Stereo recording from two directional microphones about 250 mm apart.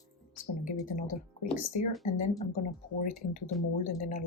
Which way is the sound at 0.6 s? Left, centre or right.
Left.